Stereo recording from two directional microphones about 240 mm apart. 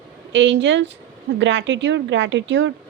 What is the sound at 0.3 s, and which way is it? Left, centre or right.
A woman's voice, right.